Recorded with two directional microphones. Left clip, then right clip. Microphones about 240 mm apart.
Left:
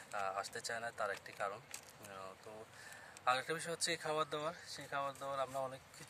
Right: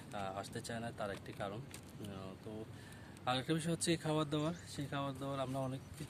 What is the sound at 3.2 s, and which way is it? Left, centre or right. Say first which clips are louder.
Speech: left 1 dB; centre.